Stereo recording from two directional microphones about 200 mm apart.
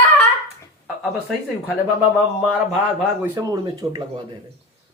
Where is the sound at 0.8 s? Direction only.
Centre (ahead or behind).